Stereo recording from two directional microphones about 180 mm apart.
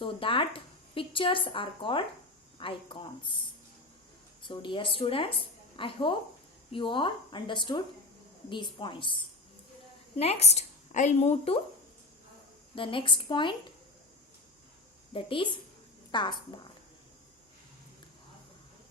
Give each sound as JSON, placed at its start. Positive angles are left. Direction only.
{"t": 0.0, "sound": "a woman's voice", "side_deg": 30}
{"t": 4.4, "sound": "a woman's voice", "side_deg": 25}
{"t": 10.2, "sound": "a woman's voice", "side_deg": 35}
{"t": 12.7, "sound": "a woman's voice", "side_deg": 30}
{"t": 15.1, "sound": "a woman's voice", "side_deg": 30}